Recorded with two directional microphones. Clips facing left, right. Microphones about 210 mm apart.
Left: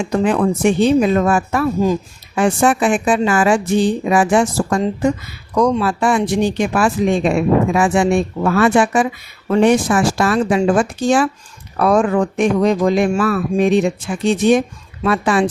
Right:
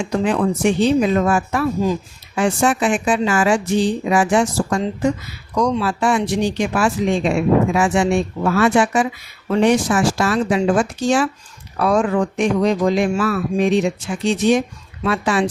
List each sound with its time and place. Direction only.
0.1 s speech: 50° left (ahead or behind)